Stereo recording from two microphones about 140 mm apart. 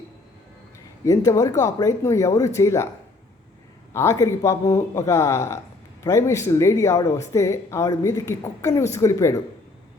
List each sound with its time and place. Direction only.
1.0 s speech: 25° left (ahead or behind)
3.9 s speech: 20° left (ahead or behind)